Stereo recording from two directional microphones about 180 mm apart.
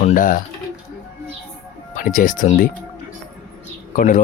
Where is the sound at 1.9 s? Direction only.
50° left (ahead or behind).